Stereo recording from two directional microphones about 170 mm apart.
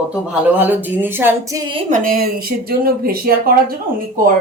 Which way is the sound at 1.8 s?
50° right (ahead or behind).